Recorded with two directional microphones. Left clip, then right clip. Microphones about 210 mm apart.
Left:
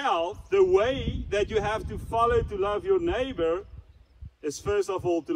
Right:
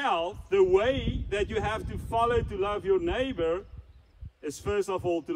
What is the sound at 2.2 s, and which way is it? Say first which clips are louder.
A man's voice: left 3 dB; 10° left (ahead or behind).